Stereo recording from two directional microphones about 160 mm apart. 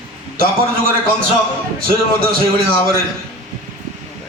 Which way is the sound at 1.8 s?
65° right (ahead or behind).